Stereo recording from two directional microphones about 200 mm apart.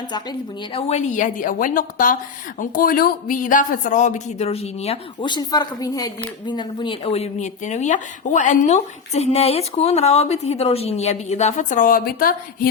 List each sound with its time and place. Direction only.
0.1 s speech: 25° left (ahead or behind); by 12.6 s 45° left (ahead or behind)